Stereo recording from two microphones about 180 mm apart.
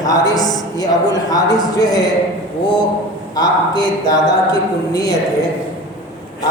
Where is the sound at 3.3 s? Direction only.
20° left (ahead or behind).